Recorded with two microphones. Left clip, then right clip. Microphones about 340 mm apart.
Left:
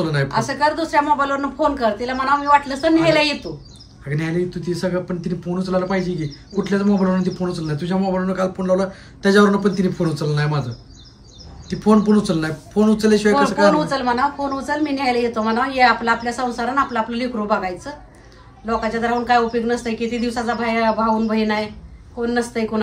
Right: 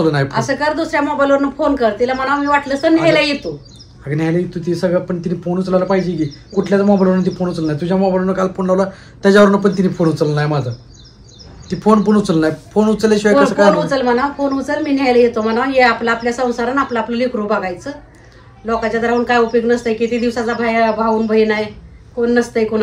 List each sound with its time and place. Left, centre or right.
0.0 s speech: centre
0.3 s a woman's voice: centre
4.0 s speech: centre
11.7 s speech: centre
13.8 s a woman's voice: centre